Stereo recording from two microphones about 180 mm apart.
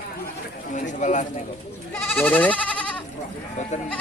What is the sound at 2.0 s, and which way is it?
Speech, 10° left (ahead or behind).